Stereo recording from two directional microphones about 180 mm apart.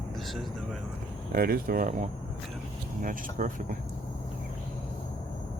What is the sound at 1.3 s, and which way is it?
Speech, 55° right (ahead or behind).